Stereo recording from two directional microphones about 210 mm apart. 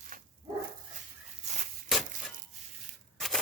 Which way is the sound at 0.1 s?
40° right (ahead or behind).